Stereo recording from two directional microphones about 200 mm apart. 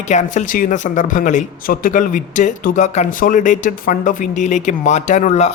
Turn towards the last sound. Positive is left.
turn(degrees=35)  # may be behind; listen again after turning